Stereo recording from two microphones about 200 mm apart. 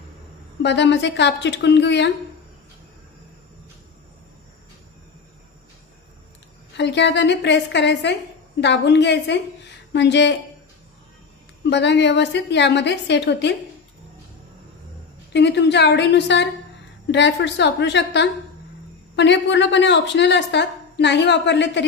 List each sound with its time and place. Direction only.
0.6 s a woman's voice: 60° left (ahead or behind)
6.8 s a woman's voice: 60° left (ahead or behind)
11.7 s a woman's voice: 60° left (ahead or behind)
15.3 s a woman's voice: 60° left (ahead or behind)